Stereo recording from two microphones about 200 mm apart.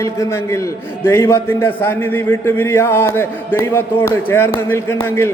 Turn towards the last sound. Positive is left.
turn(degrees=10)  # may be behind; listen again after turning